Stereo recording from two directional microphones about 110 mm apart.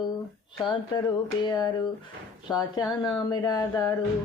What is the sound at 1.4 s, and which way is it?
Speech, 40° left (ahead or behind).